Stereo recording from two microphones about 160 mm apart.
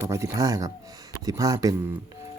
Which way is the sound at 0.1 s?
20° right (ahead or behind).